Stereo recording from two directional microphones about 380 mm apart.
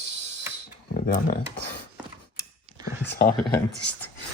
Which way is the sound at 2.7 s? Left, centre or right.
Centre.